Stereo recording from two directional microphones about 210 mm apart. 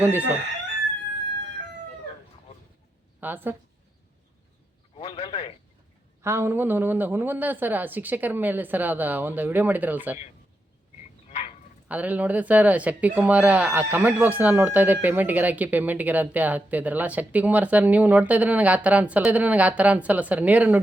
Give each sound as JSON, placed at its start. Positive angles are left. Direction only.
{"t": 3.2, "sound": "a woman's voice", "side_deg": -10}
{"t": 4.9, "sound": "a man's voice", "side_deg": 25}
{"t": 6.2, "sound": "speech", "side_deg": -10}
{"t": 11.3, "sound": "frog", "side_deg": 30}
{"t": 11.9, "sound": "speech", "side_deg": -5}